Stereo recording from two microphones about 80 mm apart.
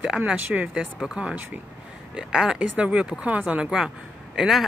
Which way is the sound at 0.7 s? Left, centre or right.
Centre.